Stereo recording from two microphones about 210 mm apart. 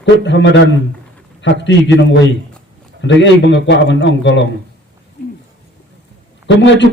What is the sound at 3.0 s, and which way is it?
A man's voice, 60° left (ahead or behind).